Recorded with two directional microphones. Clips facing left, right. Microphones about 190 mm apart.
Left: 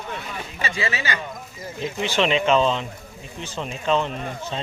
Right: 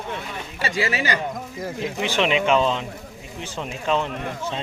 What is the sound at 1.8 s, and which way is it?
Speech, 15° right (ahead or behind).